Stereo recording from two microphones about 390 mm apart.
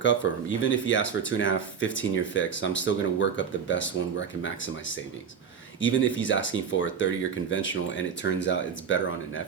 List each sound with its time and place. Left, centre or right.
0.2 s speech: left